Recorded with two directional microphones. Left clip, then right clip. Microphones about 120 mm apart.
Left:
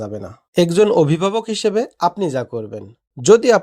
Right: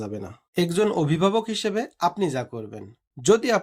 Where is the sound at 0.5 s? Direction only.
65° left (ahead or behind).